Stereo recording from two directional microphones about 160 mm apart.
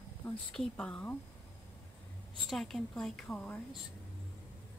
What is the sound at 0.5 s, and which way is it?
Speech, 5° left (ahead or behind).